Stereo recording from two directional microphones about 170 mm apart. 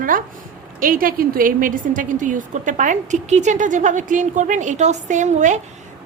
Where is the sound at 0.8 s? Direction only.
55° right (ahead or behind).